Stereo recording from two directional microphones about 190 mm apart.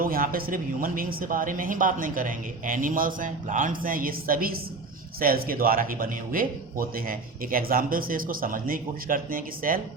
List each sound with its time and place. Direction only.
0.0 s speech: 50° right (ahead or behind)